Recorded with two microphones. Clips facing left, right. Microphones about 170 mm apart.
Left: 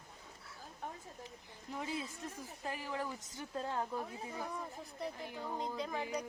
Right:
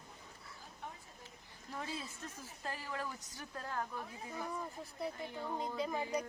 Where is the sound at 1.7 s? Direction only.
15° left (ahead or behind).